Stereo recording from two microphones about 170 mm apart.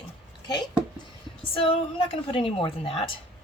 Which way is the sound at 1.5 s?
35° left (ahead or behind).